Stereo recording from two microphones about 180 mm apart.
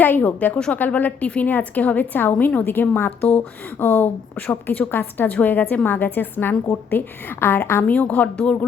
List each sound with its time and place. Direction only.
0.0 s a woman's voice: 10° left (ahead or behind)